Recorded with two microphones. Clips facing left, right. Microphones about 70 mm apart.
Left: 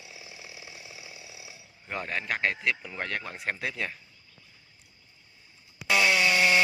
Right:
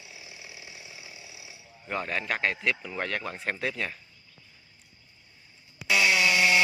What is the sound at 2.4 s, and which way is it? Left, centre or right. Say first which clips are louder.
Speech: left 1 dB; left.